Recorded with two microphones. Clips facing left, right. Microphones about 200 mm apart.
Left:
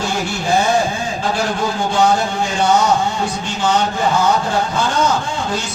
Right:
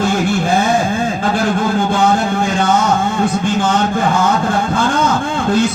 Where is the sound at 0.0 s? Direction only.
55° right (ahead or behind).